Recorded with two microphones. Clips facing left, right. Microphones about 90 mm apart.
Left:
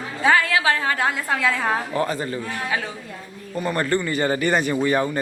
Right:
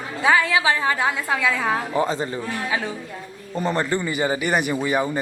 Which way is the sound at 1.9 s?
20° right (ahead or behind).